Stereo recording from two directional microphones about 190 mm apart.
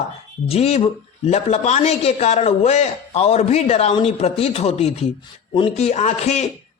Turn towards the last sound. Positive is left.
turn(degrees=35)  # may be behind; listen again after turning